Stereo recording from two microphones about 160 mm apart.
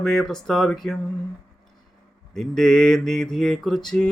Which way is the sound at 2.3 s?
Centre (ahead or behind).